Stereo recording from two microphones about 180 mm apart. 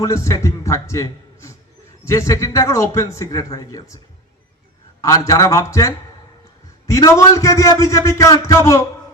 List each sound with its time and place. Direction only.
0.0 s a man's voice: 15° left (ahead or behind)